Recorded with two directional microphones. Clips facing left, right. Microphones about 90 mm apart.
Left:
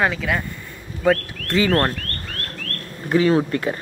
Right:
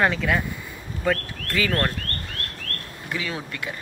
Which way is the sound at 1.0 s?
25° left (ahead or behind).